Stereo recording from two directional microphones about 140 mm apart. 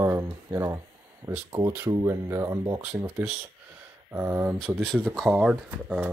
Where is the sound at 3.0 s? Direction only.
10° right (ahead or behind).